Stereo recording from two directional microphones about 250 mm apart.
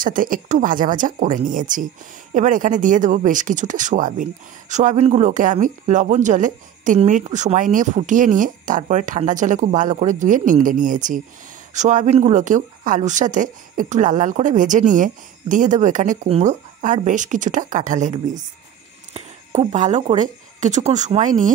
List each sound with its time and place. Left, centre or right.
0.0 s speech: right